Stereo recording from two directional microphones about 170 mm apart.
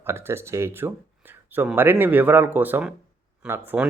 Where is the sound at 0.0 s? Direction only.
15° right (ahead or behind).